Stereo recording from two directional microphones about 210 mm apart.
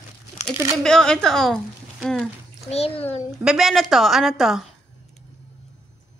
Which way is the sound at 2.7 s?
30° left (ahead or behind).